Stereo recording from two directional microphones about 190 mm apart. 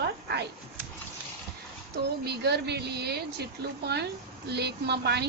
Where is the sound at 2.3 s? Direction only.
60° right (ahead or behind).